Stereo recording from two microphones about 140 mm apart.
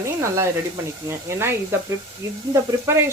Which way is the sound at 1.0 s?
20° right (ahead or behind).